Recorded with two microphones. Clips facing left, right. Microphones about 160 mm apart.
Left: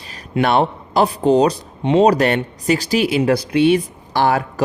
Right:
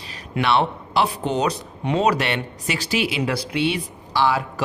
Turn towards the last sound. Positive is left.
turn(degrees=50)  # may be behind; listen again after turning